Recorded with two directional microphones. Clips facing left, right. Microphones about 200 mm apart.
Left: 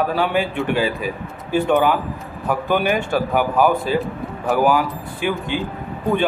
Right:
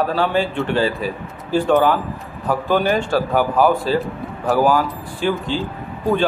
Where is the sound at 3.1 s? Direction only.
15° left (ahead or behind).